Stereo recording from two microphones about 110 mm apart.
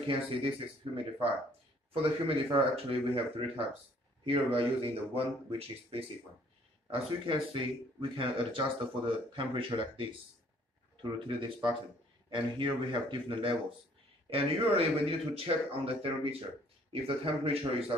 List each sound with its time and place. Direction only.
0.0 s speech: 55° right (ahead or behind)
2.2 s speech: 55° right (ahead or behind)